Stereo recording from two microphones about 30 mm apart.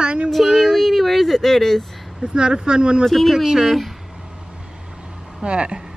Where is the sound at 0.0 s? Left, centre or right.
Right.